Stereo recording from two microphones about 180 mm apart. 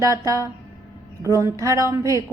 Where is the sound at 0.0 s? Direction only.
20° right (ahead or behind).